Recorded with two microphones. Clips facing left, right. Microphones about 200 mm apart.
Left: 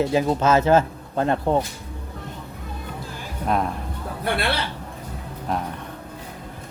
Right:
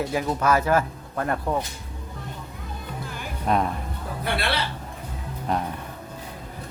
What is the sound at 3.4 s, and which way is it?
Speech, centre (ahead or behind).